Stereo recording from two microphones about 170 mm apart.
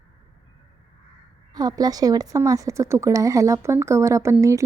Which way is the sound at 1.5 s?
25° right (ahead or behind).